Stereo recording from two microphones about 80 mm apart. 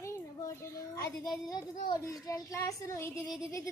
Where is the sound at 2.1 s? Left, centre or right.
Left.